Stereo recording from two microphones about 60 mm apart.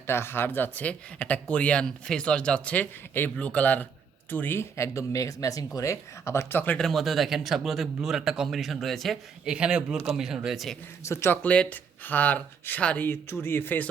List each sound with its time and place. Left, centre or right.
0.1 s speech: left
0.9 s speech: left
4.8 s speech: left
6.7 s speech: centre
9.5 s a man's voice: centre
11.0 s speech: left
11.4 s speech: left
13.0 s speech: left